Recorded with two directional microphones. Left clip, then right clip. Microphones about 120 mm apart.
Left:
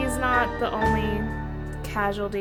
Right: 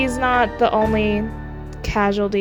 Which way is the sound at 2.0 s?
55° right (ahead or behind).